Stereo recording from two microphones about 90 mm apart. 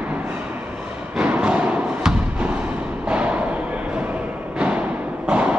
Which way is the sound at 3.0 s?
15° right (ahead or behind).